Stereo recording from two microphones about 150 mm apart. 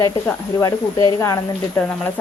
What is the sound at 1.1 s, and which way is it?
Speech, 20° left (ahead or behind).